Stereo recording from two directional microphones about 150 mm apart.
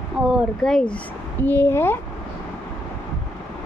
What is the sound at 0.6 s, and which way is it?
A woman's voice, 5° left (ahead or behind).